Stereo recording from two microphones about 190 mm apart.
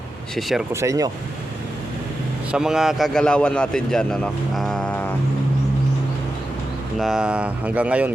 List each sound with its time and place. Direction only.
0.3 s a man's voice: centre (ahead or behind)
0.7 s speech: 15° right (ahead or behind)
2.5 s a man's voice: 5° right (ahead or behind)
7.0 s speech: 5° right (ahead or behind)